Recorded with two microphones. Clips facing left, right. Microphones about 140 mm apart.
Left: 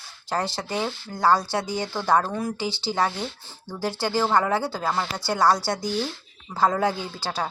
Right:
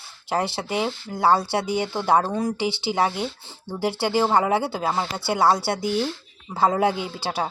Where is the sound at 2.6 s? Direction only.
65° right (ahead or behind).